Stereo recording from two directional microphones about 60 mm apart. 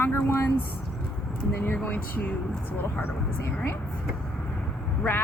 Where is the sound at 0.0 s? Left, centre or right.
Left.